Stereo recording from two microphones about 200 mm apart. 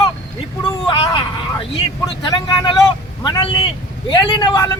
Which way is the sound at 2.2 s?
20° left (ahead or behind).